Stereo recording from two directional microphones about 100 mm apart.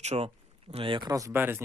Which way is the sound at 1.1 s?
35° right (ahead or behind).